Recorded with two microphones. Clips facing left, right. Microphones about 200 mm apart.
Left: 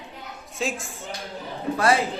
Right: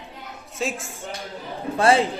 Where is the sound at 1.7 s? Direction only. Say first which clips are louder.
Right 3 dB; 30° right (ahead or behind).